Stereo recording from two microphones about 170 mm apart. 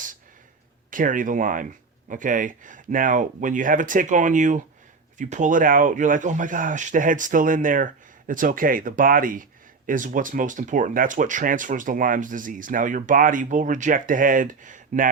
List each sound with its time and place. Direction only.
0.9 s speech: 50° right (ahead or behind)